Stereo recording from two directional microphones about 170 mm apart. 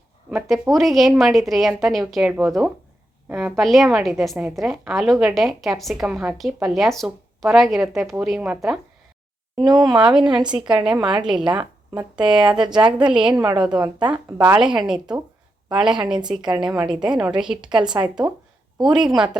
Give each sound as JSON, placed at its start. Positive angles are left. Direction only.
{"t": 0.3, "sound": "speech", "side_deg": 0}
{"t": 9.6, "sound": "speech", "side_deg": -25}
{"t": 9.8, "sound": "speech", "side_deg": -5}
{"t": 11.4, "sound": "a woman's voice", "side_deg": -25}
{"t": 12.1, "sound": "speech", "side_deg": -5}